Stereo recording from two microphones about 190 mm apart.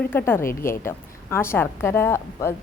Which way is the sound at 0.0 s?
10° left (ahead or behind).